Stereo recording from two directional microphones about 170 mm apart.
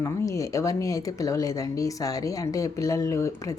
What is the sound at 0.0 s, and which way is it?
Speech, 20° left (ahead or behind).